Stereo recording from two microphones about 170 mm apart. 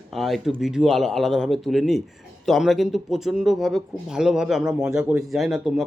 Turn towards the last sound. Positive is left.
turn(degrees=0)  # may be behind; listen again after turning